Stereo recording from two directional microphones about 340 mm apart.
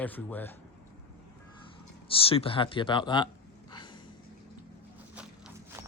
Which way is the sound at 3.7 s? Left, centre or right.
Centre.